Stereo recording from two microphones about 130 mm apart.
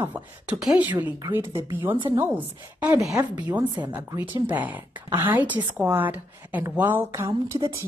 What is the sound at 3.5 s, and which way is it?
Speech, 15° right (ahead or behind).